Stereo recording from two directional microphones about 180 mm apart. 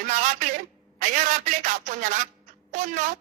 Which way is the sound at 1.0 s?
45° right (ahead or behind).